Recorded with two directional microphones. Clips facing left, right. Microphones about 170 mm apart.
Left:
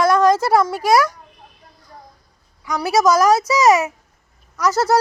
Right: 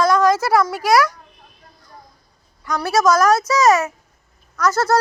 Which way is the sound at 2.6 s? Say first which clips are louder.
Left 1 dB; 10° left (ahead or behind).